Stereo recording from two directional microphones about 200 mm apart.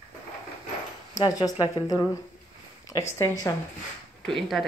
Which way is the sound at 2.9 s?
5° right (ahead or behind).